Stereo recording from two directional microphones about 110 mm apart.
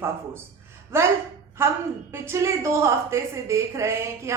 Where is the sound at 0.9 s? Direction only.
25° right (ahead or behind).